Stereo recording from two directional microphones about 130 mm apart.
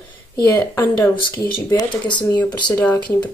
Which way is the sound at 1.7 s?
35° left (ahead or behind).